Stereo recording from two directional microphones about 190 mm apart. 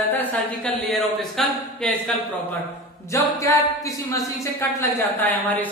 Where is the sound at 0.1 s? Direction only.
10° left (ahead or behind).